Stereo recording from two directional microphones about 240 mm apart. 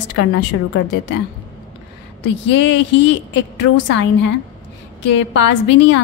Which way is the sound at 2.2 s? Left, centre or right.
Left.